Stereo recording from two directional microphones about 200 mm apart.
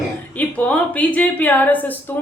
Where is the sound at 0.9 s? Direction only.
5° left (ahead or behind).